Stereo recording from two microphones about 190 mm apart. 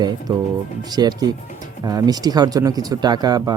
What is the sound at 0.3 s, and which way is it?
Speech, 20° right (ahead or behind).